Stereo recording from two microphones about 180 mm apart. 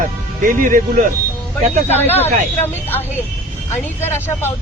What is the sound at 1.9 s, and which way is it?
Speech, 10° left (ahead or behind).